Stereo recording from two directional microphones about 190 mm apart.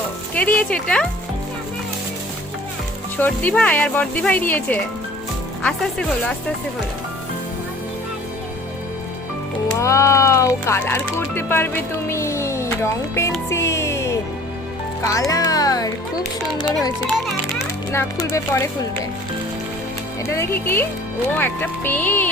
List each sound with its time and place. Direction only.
0.3 s speech: 5° left (ahead or behind)
3.2 s speech: 10° left (ahead or behind)
9.7 s speech: 15° left (ahead or behind)
13.5 s music: 15° left (ahead or behind)
15.0 s speech: 15° left (ahead or behind)
17.9 s speech: 15° left (ahead or behind)
20.2 s speech: 15° left (ahead or behind)